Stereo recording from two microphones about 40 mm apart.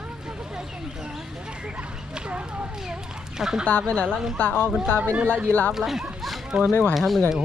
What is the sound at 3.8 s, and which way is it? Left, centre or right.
Speech, left.